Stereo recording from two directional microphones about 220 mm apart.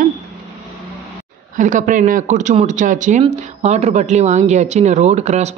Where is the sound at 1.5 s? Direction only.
35° right (ahead or behind).